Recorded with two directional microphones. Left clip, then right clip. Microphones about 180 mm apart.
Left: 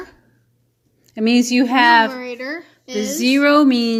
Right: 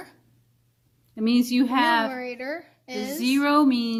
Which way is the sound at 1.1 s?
15° left (ahead or behind).